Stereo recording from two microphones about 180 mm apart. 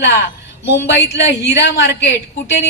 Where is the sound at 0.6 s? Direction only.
75° left (ahead or behind).